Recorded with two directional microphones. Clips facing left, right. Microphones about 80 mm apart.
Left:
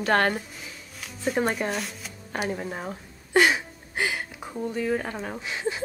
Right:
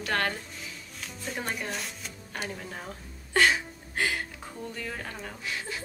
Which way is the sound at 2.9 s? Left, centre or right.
Centre.